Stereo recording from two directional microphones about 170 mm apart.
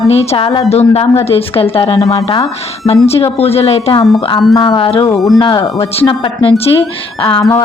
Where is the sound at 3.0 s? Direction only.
35° left (ahead or behind); by 6.1 s 20° left (ahead or behind).